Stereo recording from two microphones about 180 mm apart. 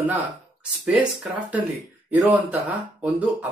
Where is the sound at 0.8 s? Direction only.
5° right (ahead or behind).